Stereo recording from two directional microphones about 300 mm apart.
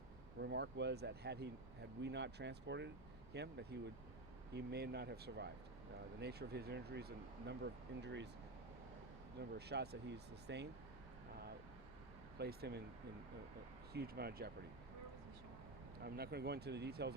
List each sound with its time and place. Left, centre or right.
0.3 s speech: right
9.6 s speech: right
12.4 s speech: right
13.9 s speech: right
16.0 s speech: right